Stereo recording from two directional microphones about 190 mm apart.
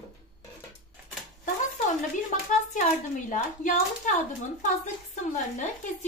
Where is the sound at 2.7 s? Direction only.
40° left (ahead or behind).